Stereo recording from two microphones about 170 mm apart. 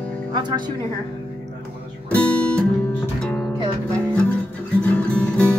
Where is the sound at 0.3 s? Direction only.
25° right (ahead or behind).